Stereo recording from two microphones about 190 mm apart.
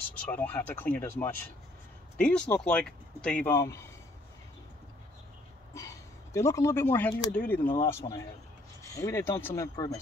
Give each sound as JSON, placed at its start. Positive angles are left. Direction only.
{"t": 0.3, "sound": "speech", "side_deg": 10}
{"t": 5.8, "sound": "speech", "side_deg": 15}